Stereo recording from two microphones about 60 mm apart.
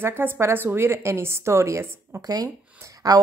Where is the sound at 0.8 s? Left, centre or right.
Right.